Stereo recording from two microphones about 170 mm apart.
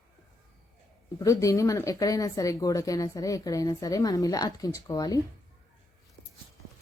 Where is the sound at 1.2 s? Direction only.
20° left (ahead or behind).